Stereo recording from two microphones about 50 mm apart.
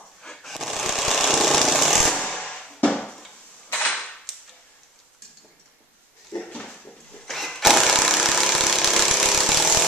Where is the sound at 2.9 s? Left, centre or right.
Centre.